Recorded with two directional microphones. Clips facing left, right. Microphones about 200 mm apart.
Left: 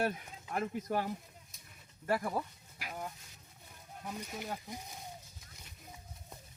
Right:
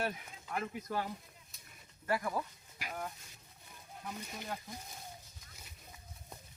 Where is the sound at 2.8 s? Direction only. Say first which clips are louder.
Right 1 dB; centre (ahead or behind).